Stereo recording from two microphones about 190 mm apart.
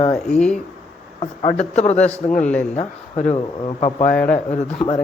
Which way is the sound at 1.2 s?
30° left (ahead or behind).